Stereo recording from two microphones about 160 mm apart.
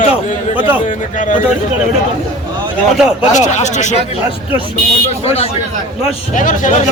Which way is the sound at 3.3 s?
45° left (ahead or behind).